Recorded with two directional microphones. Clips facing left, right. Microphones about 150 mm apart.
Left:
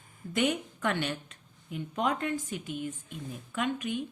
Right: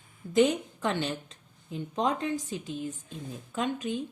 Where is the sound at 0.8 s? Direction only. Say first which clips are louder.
Right 1 dB; 25° right (ahead or behind).